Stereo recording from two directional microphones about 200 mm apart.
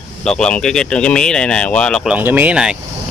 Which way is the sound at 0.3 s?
5° left (ahead or behind).